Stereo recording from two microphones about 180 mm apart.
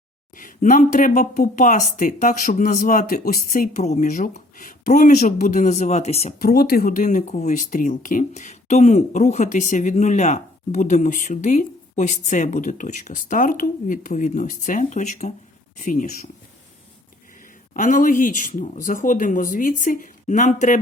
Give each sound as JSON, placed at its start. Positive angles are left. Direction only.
{"t": 0.3, "sound": "speech", "side_deg": 45}
{"t": 6.4, "sound": "speech", "side_deg": 55}
{"t": 17.7, "sound": "speech", "side_deg": 45}